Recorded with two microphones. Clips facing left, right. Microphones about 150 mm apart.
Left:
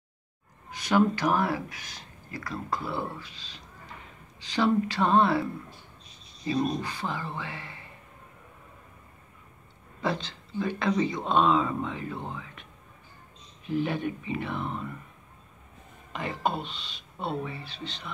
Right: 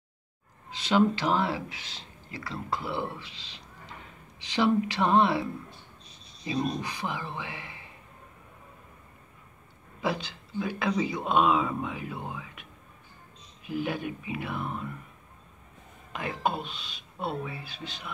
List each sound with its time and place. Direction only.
0.8 s speech: 25° right (ahead or behind)
9.9 s speech: 10° right (ahead or behind)
13.7 s speech: 5° right (ahead or behind)
16.1 s speech: 5° right (ahead or behind)